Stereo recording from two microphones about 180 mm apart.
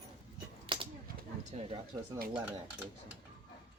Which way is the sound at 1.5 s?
30° right (ahead or behind).